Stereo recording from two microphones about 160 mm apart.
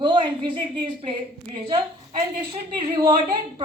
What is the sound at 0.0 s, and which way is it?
A woman's voice, 30° right (ahead or behind).